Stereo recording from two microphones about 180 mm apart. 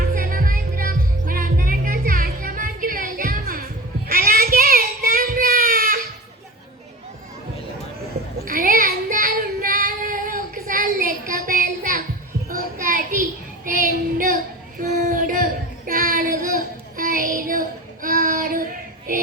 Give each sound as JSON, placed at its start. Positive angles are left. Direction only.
{"t": 0.1, "sound": "music", "side_deg": -50}
{"t": 4.1, "sound": "child singing", "side_deg": -50}
{"t": 8.4, "sound": "child singing", "side_deg": -50}